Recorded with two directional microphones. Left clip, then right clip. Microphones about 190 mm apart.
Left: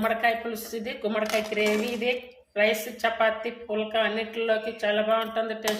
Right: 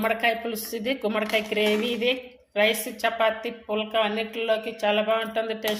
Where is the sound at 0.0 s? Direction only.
40° right (ahead or behind).